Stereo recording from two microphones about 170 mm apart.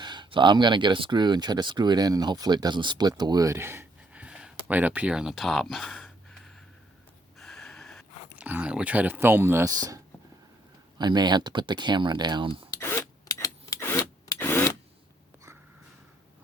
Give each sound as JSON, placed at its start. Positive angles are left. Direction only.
{"t": 0.0, "sound": "speech", "side_deg": -25}
{"t": 7.3, "sound": "a sound", "side_deg": 0}
{"t": 8.4, "sound": "speech", "side_deg": -10}
{"t": 12.7, "sound": "rub", "side_deg": 15}